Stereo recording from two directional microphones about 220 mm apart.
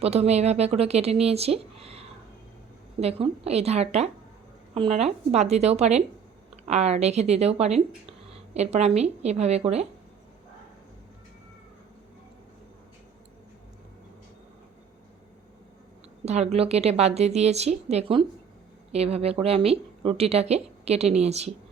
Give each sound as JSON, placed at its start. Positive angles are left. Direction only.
{"t": 0.0, "sound": "speech", "side_deg": -30}
{"t": 16.2, "sound": "speech", "side_deg": -30}